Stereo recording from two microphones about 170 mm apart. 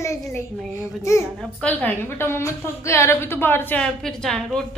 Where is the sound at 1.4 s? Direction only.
5° left (ahead or behind).